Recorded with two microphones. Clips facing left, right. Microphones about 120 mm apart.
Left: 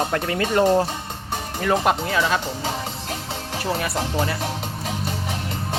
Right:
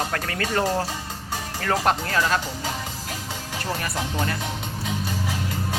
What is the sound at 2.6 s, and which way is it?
Music, 30° left (ahead or behind).